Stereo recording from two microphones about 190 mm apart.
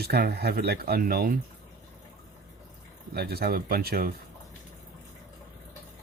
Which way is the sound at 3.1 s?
55° right (ahead or behind).